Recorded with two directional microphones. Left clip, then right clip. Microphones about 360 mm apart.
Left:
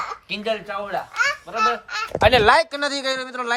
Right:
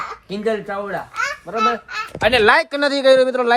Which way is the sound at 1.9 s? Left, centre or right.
Left.